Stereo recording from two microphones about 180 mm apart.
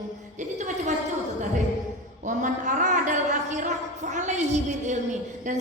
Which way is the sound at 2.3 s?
45° right (ahead or behind).